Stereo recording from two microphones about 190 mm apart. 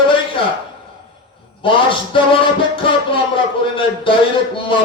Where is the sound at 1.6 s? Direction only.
25° left (ahead or behind).